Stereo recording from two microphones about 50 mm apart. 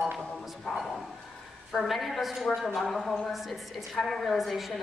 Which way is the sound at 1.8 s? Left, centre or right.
Centre.